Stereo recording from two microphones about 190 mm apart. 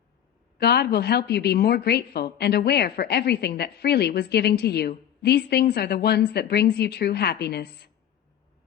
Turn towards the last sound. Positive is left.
turn(degrees=60)  # may be behind; listen again after turning